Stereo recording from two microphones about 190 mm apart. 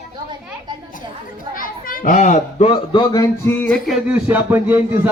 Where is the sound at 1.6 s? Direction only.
45° left (ahead or behind).